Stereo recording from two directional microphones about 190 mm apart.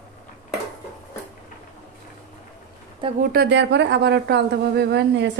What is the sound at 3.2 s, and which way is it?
Speech, 55° right (ahead or behind).